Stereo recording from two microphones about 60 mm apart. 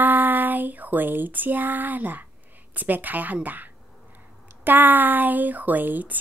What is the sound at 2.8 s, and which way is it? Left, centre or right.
Speech, right.